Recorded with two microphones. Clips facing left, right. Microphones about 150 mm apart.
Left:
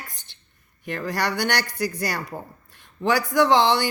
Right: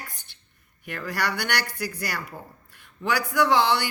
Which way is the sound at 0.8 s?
35° left (ahead or behind).